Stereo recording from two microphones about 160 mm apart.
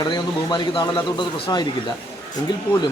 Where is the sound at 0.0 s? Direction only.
30° left (ahead or behind).